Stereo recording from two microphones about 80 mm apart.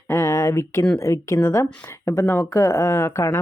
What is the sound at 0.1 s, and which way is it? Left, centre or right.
Speech, left.